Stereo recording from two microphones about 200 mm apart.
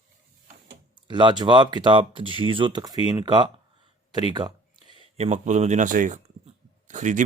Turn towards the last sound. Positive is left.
turn(degrees=-40)  # may be behind; listen again after turning